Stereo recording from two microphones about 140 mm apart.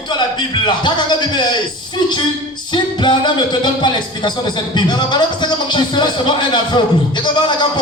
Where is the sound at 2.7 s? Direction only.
30° left (ahead or behind).